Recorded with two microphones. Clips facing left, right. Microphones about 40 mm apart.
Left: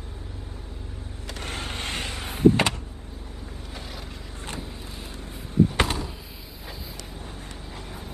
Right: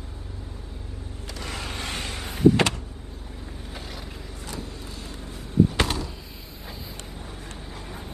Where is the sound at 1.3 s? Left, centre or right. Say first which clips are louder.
Left 1 dB; left.